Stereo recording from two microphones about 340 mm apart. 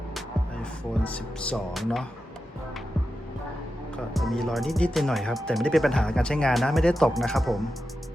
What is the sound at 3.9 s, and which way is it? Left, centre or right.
Speech, centre.